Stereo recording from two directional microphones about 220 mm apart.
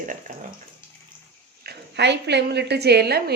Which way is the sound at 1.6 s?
50° right (ahead or behind).